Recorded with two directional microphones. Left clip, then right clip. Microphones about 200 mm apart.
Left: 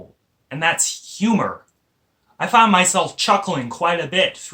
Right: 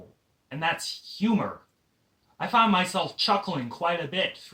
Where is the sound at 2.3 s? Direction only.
25° left (ahead or behind).